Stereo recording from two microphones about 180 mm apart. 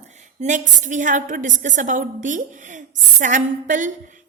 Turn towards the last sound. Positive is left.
turn(degrees=-45)  # may be behind; listen again after turning